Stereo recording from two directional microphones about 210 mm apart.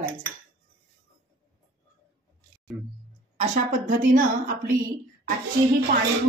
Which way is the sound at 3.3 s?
35° right (ahead or behind).